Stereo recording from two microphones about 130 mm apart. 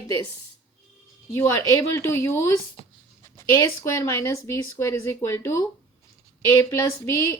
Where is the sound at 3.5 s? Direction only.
25° left (ahead or behind).